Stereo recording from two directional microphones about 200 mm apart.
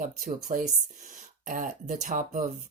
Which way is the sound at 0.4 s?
40° right (ahead or behind).